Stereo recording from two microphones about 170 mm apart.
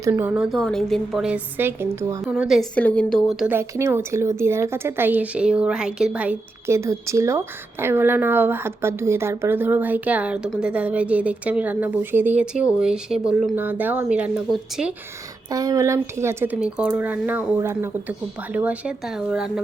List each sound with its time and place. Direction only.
0.0 s a woman's voice: 15° right (ahead or behind)
2.2 s a woman's voice: 5° right (ahead or behind)
15.4 s a woman's voice: 20° right (ahead or behind); by 19.6 s 5° right (ahead or behind)